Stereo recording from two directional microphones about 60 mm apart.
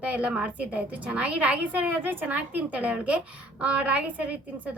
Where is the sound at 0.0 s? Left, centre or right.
Right.